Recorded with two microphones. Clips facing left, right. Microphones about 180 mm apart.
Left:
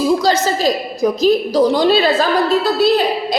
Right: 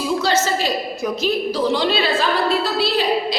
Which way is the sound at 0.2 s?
40° left (ahead or behind).